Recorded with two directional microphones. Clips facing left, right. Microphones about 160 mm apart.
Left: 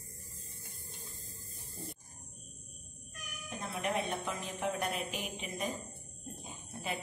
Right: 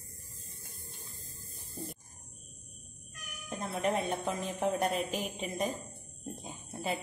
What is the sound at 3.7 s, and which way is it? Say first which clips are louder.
Speech: right 4 dB; 30° right (ahead or behind).